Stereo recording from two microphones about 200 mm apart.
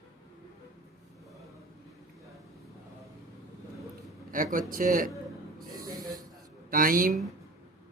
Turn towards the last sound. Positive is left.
turn(degrees=-45)  # may be behind; listen again after turning